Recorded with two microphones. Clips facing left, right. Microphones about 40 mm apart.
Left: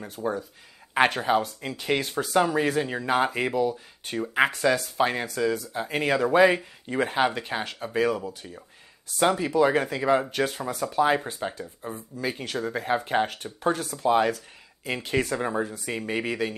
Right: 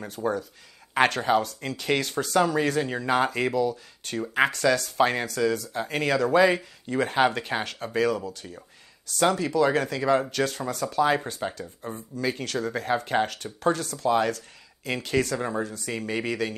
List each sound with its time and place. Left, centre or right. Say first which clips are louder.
0.2 s speech: right 2 dB; centre
0.9 s speech: even; centre
7.1 s speech: right 4 dB; centre
11.6 s speech: even; centre